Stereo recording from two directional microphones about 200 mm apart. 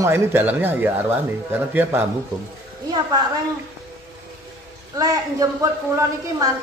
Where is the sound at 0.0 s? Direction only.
10° right (ahead or behind).